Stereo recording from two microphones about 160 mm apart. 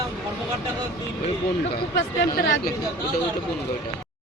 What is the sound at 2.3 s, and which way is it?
Speech, 65° left (ahead or behind).